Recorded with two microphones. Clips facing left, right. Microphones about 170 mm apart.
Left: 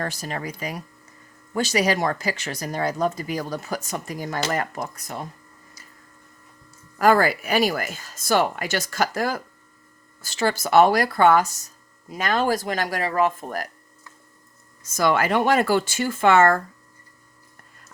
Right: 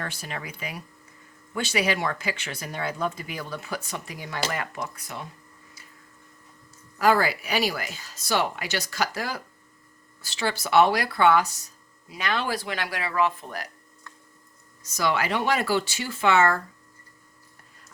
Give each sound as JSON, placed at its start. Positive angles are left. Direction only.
{"t": 0.0, "sound": "speech", "side_deg": 40}
{"t": 7.0, "sound": "speech", "side_deg": 50}
{"t": 14.8, "sound": "speech", "side_deg": 50}